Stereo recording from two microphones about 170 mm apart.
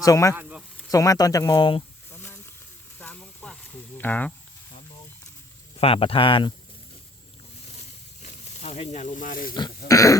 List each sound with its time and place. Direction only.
0.0 s speech: 20° left (ahead or behind)
0.3 s insect: 5° right (ahead or behind)
0.9 s speech: 20° left (ahead or behind)
2.1 s a sound: 10° left (ahead or behind)
5.7 s speech: 35° left (ahead or behind)
7.8 s snake: 40° left (ahead or behind)
9.6 s speech: 20° left (ahead or behind)